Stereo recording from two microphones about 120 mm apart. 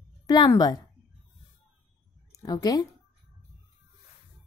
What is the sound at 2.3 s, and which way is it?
Speech, 30° left (ahead or behind).